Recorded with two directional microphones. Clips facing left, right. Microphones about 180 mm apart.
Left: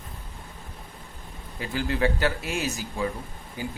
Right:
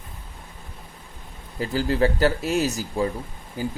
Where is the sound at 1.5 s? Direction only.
40° right (ahead or behind).